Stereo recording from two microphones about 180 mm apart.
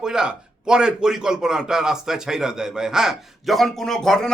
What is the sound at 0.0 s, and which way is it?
A man's voice, 5° right (ahead or behind).